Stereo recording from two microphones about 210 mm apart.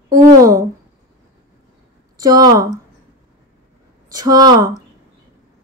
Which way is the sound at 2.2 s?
15° right (ahead or behind).